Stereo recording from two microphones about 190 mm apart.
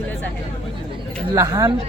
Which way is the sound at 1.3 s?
15° right (ahead or behind).